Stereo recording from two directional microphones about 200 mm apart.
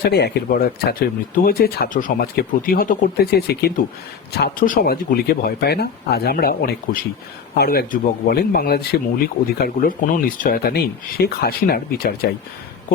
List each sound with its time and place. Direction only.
0.0 s speech: 55° left (ahead or behind)